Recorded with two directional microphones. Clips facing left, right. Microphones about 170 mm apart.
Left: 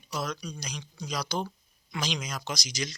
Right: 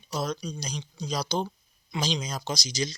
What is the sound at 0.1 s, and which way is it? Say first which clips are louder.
Speech: right 3 dB; 30° right (ahead or behind).